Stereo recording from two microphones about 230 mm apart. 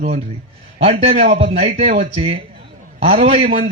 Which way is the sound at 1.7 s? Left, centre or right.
Right.